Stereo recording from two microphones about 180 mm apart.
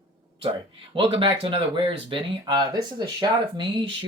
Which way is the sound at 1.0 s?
30° right (ahead or behind).